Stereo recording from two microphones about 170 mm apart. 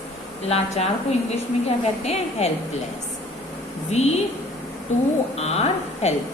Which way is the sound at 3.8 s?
40° left (ahead or behind).